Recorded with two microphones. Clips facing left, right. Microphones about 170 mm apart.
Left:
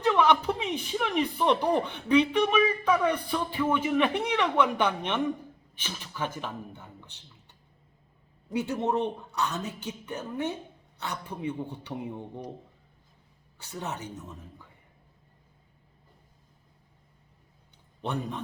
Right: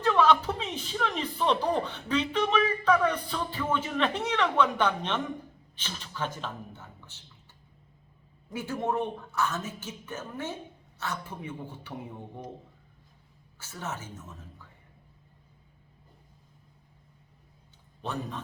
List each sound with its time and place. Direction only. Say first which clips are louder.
0.0 s speech: even; 15° left (ahead or behind)
8.5 s speech: left 3 dB; 20° left (ahead or behind)
13.6 s speech: left 2 dB; 15° left (ahead or behind)
18.0 s speech: left 3 dB; 15° left (ahead or behind)